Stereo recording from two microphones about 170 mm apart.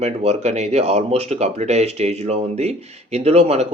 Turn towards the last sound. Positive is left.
turn(degrees=-40)  # may be behind; listen again after turning